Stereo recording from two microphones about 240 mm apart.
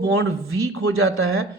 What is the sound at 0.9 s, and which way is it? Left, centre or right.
Speech, right.